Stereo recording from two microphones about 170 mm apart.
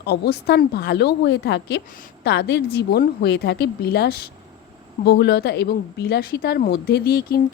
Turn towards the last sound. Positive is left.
turn(degrees=60)  # may be behind; listen again after turning